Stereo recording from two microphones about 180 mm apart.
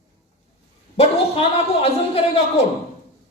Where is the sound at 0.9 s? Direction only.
35° left (ahead or behind).